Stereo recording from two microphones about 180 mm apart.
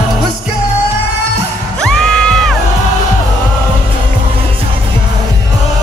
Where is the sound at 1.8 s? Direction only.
5° left (ahead or behind).